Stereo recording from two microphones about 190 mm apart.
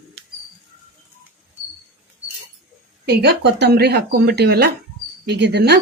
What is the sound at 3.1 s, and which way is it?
Speech, 60° right (ahead or behind).